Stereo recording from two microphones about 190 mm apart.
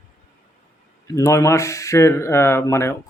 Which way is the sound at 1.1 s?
15° left (ahead or behind).